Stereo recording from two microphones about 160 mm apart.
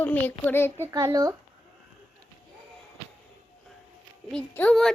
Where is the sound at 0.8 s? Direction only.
20° right (ahead or behind).